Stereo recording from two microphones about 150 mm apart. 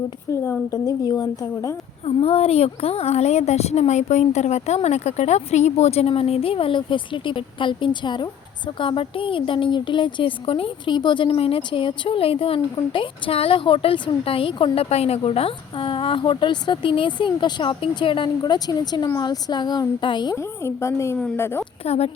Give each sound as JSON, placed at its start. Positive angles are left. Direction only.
{"t": 0.3, "sound": "a woman's voice", "side_deg": 20}
{"t": 2.0, "sound": "a woman's voice", "side_deg": 40}
{"t": 20.3, "sound": "a woman's voice", "side_deg": 20}
{"t": 21.8, "sound": "speech", "side_deg": 45}